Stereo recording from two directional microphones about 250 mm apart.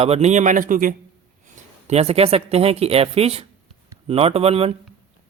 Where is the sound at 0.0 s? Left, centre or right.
Right.